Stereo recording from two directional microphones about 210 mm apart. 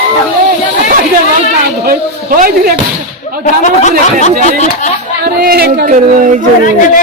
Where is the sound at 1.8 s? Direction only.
45° right (ahead or behind).